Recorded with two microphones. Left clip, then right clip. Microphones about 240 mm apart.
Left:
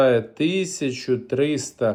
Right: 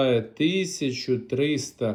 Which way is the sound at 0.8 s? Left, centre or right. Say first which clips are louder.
Left 3 dB; centre.